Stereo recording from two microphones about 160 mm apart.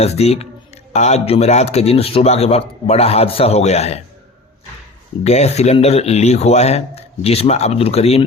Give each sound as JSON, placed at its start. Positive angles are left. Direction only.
{"t": 0.0, "sound": "a man's voice", "side_deg": 40}
{"t": 5.2, "sound": "a man's voice", "side_deg": 45}